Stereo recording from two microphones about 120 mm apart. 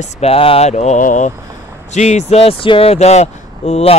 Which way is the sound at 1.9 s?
75° left (ahead or behind).